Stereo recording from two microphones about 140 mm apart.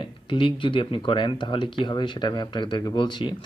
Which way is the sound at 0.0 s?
35° left (ahead or behind).